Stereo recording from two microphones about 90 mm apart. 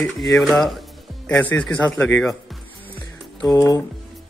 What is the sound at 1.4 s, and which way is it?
Speech, 20° left (ahead or behind).